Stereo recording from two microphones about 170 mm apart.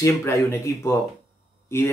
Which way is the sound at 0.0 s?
15° left (ahead or behind).